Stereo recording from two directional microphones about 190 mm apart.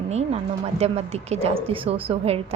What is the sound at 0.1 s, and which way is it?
A woman's voice, 35° right (ahead or behind).